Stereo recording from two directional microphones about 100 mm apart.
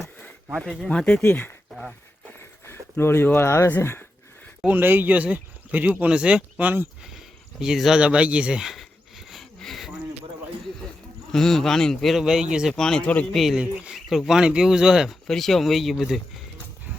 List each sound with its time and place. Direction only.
0.6 s speech: 5° left (ahead or behind); by 4.0 s 20° left (ahead or behind)
4.6 s speech: 20° right (ahead or behind)
7.6 s a sound: 5° right (ahead or behind)
11.3 s speech: 5° left (ahead or behind)
12.7 s speech: 5° left (ahead or behind)
13.3 s speech: centre (ahead or behind)